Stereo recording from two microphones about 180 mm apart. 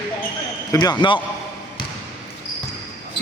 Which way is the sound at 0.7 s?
25° left (ahead or behind).